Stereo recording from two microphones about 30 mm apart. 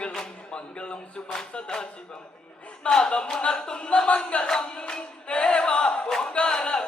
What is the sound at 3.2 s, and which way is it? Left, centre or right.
Speech, left.